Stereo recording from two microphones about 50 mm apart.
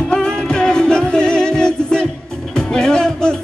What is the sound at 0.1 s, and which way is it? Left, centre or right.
Music, centre.